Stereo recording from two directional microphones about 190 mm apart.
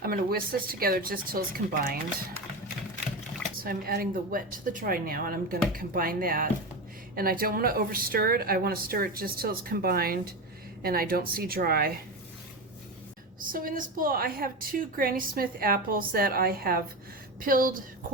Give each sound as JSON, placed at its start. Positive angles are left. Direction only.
{"t": 0.0, "sound": "a woman's voice", "side_deg": -50}
{"t": 3.6, "sound": "a woman's voice", "side_deg": -50}
{"t": 13.4, "sound": "a woman's voice", "side_deg": -45}